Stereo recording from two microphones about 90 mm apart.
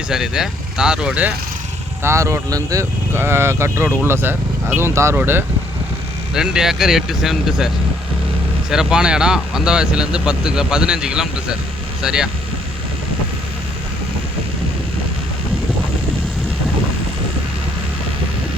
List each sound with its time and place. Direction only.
0.1 s speech: 5° right (ahead or behind)
2.0 s speech: 35° right (ahead or behind)
3.1 s speech: 25° right (ahead or behind)
6.3 s speech: 5° right (ahead or behind)
8.7 s speech: 5° right (ahead or behind)